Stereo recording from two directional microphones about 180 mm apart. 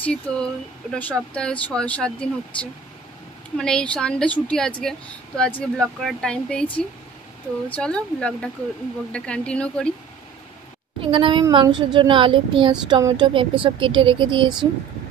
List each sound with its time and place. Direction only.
0.0 s a woman's voice: 5° left (ahead or behind)
7.7 s a woman's voice: 5° left (ahead or behind)
11.0 s speech: 30° right (ahead or behind)